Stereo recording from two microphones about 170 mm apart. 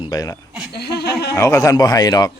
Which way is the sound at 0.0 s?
25° left (ahead or behind).